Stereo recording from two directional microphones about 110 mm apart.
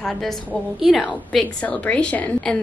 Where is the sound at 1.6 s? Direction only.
10° left (ahead or behind).